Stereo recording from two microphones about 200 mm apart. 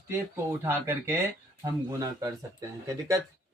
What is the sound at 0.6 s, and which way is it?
Speech, 10° right (ahead or behind).